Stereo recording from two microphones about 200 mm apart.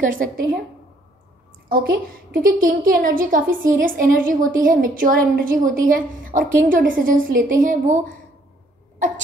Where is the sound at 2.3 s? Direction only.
45° right (ahead or behind).